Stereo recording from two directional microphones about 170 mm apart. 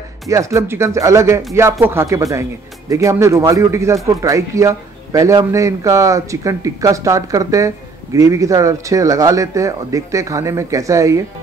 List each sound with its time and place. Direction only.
0.3 s a man's voice: 20° right (ahead or behind)